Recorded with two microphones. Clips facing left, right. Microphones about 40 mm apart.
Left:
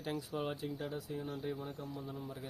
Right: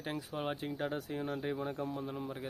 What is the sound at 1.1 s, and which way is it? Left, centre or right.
Speech, right.